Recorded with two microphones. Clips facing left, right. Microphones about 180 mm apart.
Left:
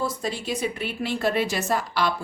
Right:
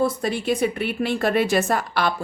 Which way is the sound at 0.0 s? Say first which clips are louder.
Right 6 dB; 60° right (ahead or behind).